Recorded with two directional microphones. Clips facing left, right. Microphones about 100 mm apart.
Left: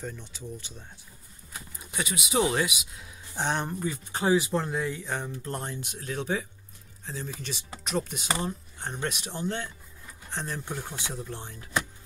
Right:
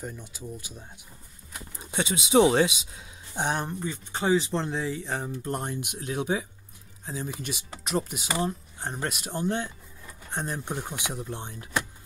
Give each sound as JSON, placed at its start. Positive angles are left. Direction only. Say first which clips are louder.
{"t": 0.0, "sound": "speech", "louder": "even", "side_deg": -10}
{"t": 1.8, "sound": "speech", "louder": "right 4 dB", "side_deg": -30}
{"t": 3.3, "sound": "speech", "louder": "right 1 dB", "side_deg": -10}
{"t": 4.2, "sound": "speech", "louder": "even", "side_deg": 5}
{"t": 5.4, "sound": "speech", "louder": "right 3 dB", "side_deg": -15}
{"t": 9.2, "sound": "speech", "louder": "right 3 dB", "side_deg": -45}
{"t": 10.3, "sound": "speech", "louder": "right 2 dB", "side_deg": -15}